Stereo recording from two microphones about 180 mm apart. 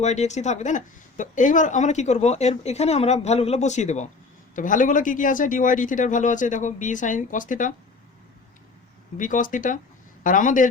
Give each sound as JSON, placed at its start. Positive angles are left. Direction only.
{"t": 0.0, "sound": "speech", "side_deg": 40}
{"t": 9.1, "sound": "speech", "side_deg": 45}